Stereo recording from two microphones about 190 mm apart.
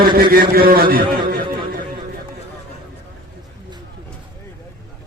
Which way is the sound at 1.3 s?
50° right (ahead or behind).